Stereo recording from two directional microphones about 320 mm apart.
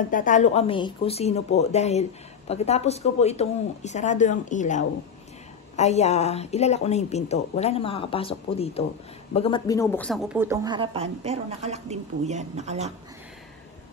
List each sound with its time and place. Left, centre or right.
0.1 s a woman's voice: left; by 12.9 s right